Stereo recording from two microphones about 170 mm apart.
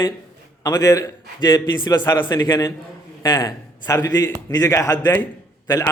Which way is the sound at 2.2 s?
15° left (ahead or behind).